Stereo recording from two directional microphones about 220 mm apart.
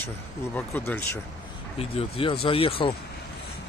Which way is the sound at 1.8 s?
25° left (ahead or behind).